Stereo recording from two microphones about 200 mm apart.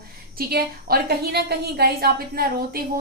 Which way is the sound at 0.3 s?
50° right (ahead or behind).